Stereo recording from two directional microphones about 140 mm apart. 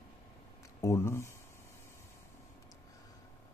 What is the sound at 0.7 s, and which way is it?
Speech, 20° left (ahead or behind).